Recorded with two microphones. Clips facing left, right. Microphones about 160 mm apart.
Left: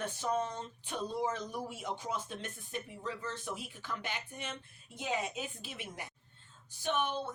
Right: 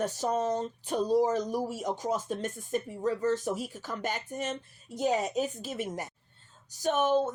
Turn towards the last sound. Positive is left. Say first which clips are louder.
# right 9 dB
turn(degrees=-45)  # may be behind; listen again after turning